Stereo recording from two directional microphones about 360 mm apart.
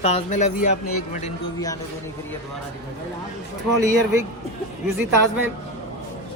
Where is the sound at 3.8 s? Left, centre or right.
Centre.